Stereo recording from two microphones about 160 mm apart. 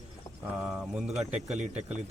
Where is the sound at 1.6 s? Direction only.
45° right (ahead or behind).